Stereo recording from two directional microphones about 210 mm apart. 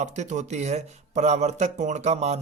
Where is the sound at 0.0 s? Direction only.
35° right (ahead or behind).